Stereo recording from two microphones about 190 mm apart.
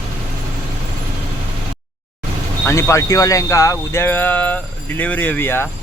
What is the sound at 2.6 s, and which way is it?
Speech, 15° left (ahead or behind).